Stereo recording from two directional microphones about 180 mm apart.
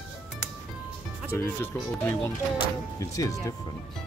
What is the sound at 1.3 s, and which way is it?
Speech, 15° left (ahead or behind).